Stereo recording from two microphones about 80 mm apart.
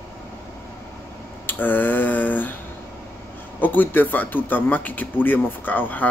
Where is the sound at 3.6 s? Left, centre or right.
Left.